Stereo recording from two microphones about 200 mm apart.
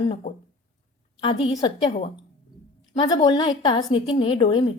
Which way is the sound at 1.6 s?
20° left (ahead or behind).